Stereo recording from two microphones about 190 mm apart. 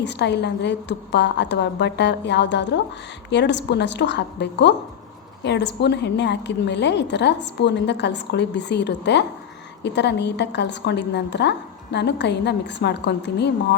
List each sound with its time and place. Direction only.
0.0 s a woman's voice: 65° left (ahead or behind)